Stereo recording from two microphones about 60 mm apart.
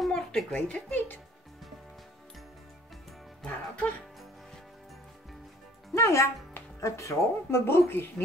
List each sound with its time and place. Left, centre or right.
0.0 s a sound: centre
0.6 s speech: centre
3.4 s music: left
5.9 s speech: left